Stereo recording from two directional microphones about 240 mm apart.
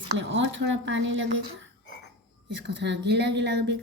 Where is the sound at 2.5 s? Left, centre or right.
Right.